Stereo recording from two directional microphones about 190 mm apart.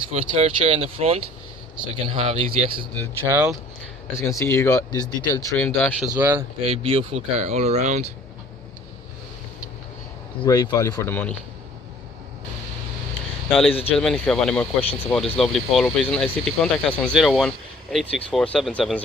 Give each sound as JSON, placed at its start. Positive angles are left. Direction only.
{"t": 0.1, "sound": "speech", "side_deg": -30}
{"t": 3.3, "sound": "speech", "side_deg": -10}
{"t": 4.2, "sound": "speech", "side_deg": 15}
{"t": 6.0, "sound": "speech", "side_deg": -10}
{"t": 6.6, "sound": "speech", "side_deg": -30}
{"t": 10.4, "sound": "speech", "side_deg": 20}
{"t": 13.5, "sound": "speech", "side_deg": 5}